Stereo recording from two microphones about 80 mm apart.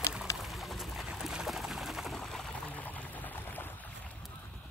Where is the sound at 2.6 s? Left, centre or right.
Centre.